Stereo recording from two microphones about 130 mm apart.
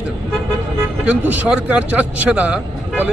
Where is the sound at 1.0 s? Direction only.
10° right (ahead or behind).